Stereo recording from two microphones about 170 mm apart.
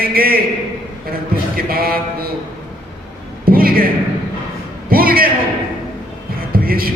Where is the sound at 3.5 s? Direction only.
60° right (ahead or behind).